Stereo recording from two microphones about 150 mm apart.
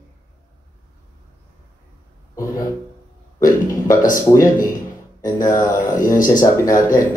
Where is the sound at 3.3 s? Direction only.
20° left (ahead or behind).